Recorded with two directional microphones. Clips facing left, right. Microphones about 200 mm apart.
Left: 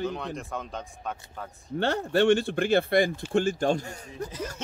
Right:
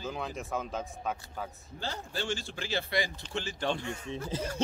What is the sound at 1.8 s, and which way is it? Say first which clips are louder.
Speech: left 14 dB; 65° left (ahead or behind).